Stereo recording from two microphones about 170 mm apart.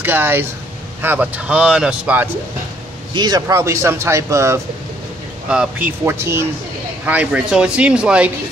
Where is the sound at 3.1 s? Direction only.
25° right (ahead or behind); by 8.3 s 5° right (ahead or behind).